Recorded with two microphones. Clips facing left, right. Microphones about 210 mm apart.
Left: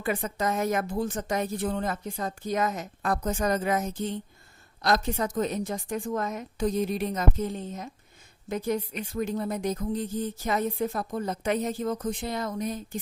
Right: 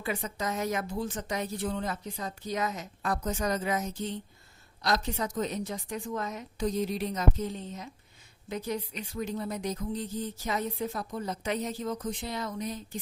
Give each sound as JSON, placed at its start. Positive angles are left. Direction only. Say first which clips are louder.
{"t": 0.0, "sound": "speech", "louder": "left 5 dB", "side_deg": 50}